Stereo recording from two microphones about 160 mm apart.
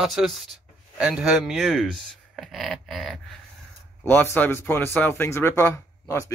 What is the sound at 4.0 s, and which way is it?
Speech, 15° left (ahead or behind).